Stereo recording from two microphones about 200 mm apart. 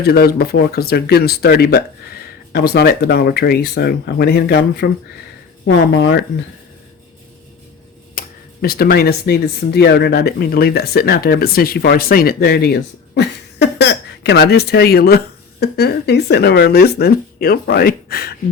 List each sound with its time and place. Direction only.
0.0 s speech: 50° left (ahead or behind)
8.2 s a sound: 45° left (ahead or behind)
8.6 s speech: 50° left (ahead or behind)